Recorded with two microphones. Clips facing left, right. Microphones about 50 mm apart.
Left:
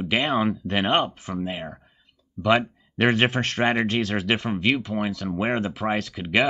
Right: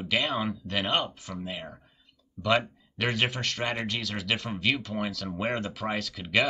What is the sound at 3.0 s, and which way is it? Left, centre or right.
Speech, left.